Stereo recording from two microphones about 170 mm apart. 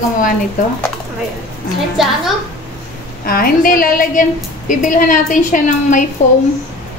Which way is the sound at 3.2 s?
60° left (ahead or behind).